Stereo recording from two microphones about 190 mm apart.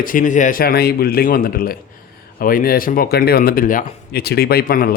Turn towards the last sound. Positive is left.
turn(degrees=50)  # may be behind; listen again after turning